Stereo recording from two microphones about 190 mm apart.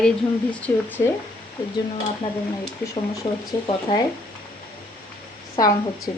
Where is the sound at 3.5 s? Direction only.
20° left (ahead or behind).